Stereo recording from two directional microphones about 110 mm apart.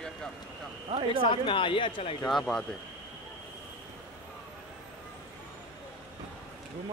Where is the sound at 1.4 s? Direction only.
50° left (ahead or behind).